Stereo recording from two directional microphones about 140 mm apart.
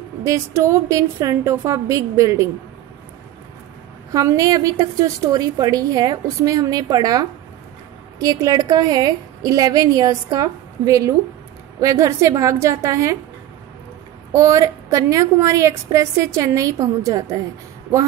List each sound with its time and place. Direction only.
0.2 s a woman's voice: 20° right (ahead or behind)
4.1 s a woman's voice: 25° right (ahead or behind)
14.3 s a woman's voice: 25° right (ahead or behind)